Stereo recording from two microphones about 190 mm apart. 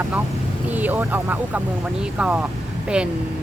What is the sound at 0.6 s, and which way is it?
Speech, 10° right (ahead or behind).